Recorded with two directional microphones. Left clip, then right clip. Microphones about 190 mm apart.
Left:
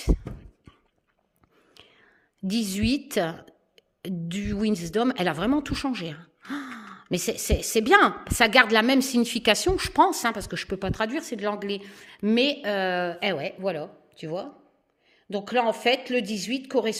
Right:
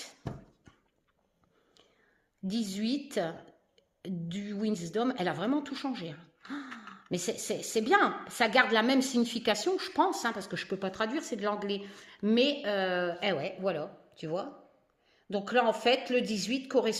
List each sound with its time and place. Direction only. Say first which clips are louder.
1.7 s a woman's voice: left 11 dB; 35° left (ahead or behind)